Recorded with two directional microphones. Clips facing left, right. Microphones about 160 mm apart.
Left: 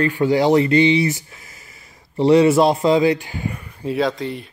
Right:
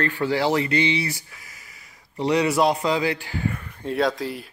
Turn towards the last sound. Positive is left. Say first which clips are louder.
# left 2 dB
turn(degrees=0)  # may be behind; listen again after turning